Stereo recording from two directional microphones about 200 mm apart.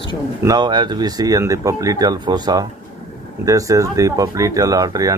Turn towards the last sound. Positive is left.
turn(degrees=-20)  # may be behind; listen again after turning